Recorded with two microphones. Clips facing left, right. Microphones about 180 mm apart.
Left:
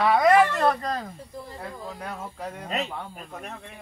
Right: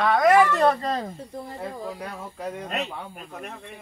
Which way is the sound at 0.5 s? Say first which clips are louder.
Right 3 dB; 20° right (ahead or behind).